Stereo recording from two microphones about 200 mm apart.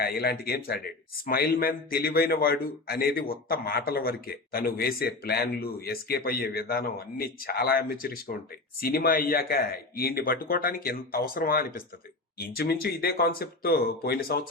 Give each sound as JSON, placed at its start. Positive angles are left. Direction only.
{"t": 0.0, "sound": "speech", "side_deg": 50}